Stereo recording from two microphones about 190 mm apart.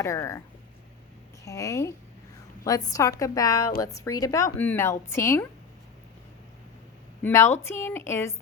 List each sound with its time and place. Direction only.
0.0 s speech: 15° left (ahead or behind)
1.5 s speech: 15° left (ahead or behind)
7.2 s speech: 10° left (ahead or behind)